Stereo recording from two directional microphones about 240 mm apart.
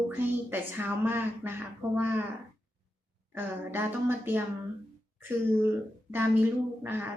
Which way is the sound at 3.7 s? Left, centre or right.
Centre.